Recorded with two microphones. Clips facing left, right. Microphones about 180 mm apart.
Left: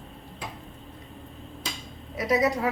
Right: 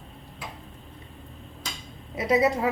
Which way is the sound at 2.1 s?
25° right (ahead or behind).